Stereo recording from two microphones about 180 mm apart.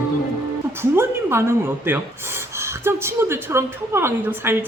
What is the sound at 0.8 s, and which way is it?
A woman's voice, 15° right (ahead or behind).